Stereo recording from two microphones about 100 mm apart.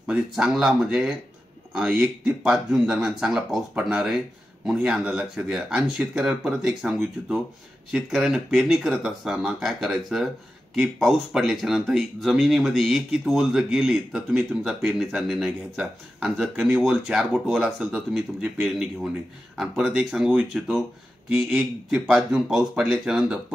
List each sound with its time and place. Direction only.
0.0 s speech: 5° right (ahead or behind)
21.3 s speech: 15° right (ahead or behind)
22.3 s speech: 5° right (ahead or behind)